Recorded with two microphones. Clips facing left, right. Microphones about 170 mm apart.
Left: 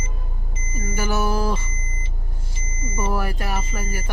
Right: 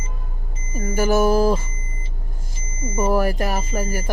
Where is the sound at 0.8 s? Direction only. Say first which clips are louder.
Right 7 dB; 40° right (ahead or behind).